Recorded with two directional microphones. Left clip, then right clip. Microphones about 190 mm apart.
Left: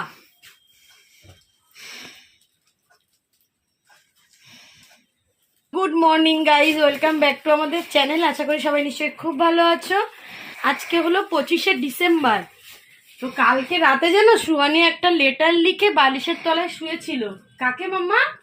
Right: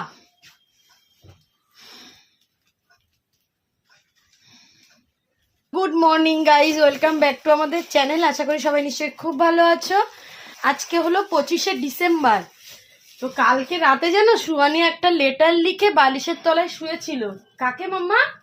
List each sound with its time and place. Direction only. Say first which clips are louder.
1.7 s snort: left 6 dB; 10° right (ahead or behind)
4.4 s a sound: left 5 dB; 10° right (ahead or behind)
5.7 s a woman's voice: even; centre (ahead or behind)
13.5 s a woman's voice: left 1 dB; 20° left (ahead or behind)
14.0 s speech: left 2 dB; 35° left (ahead or behind)
14.5 s a woman's voice: left 1 dB; 10° left (ahead or behind)